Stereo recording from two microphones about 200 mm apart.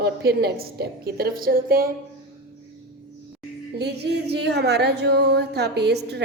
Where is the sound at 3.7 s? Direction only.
55° right (ahead or behind).